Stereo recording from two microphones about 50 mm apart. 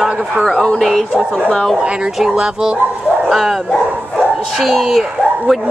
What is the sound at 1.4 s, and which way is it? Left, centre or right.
Speech, left.